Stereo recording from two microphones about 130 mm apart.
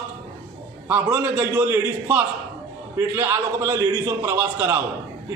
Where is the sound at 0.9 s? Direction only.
15° right (ahead or behind).